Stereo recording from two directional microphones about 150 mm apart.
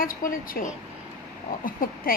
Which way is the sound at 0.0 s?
70° left (ahead or behind).